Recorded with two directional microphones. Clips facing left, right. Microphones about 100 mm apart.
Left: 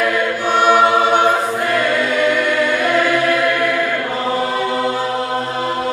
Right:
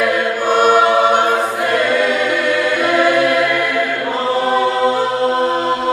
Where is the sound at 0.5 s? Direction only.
45° right (ahead or behind).